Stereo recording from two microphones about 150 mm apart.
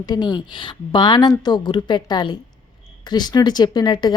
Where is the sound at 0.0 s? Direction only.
30° left (ahead or behind).